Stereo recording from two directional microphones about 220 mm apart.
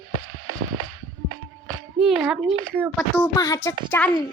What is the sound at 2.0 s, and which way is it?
Speech, centre (ahead or behind).